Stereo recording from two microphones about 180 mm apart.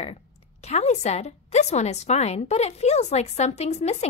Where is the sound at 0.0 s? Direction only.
35° left (ahead or behind).